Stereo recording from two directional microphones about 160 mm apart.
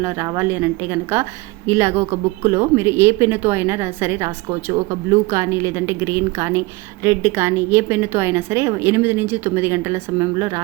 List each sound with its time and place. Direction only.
0.3 s speech: 10° right (ahead or behind)